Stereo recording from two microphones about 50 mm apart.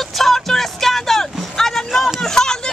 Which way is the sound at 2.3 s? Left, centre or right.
Centre.